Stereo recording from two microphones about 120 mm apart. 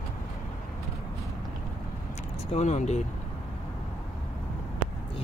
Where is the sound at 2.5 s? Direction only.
70° left (ahead or behind).